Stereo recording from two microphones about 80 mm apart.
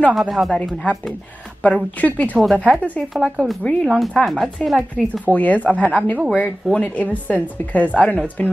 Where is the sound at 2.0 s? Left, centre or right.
Centre.